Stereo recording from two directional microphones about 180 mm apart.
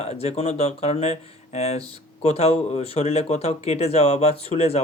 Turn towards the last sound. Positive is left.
turn(degrees=35)  # may be behind; listen again after turning